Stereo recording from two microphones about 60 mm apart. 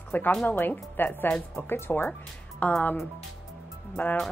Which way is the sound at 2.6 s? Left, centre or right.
Left.